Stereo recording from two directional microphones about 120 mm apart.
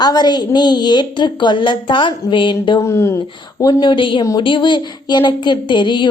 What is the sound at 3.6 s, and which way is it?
A woman's voice, 40° left (ahead or behind).